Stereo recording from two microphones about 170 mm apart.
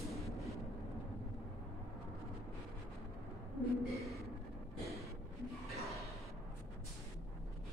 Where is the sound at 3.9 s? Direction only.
Centre (ahead or behind).